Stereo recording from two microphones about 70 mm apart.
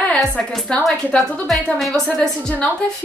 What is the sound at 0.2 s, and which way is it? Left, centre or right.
A woman's voice, centre.